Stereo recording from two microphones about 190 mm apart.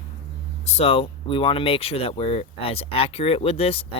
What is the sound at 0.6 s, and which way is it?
Speech, 35° left (ahead or behind).